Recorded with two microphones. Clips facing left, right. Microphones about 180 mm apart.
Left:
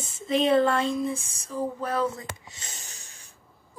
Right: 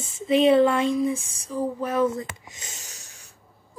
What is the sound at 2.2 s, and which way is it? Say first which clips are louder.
Speech: right 4 dB; 30° left (ahead or behind).